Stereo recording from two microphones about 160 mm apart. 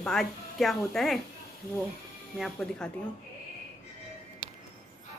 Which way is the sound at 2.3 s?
Centre (ahead or behind).